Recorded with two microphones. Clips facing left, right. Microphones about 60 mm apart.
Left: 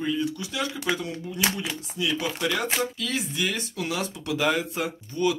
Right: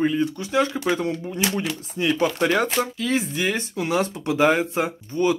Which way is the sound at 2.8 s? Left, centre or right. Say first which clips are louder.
Right 5 dB; right.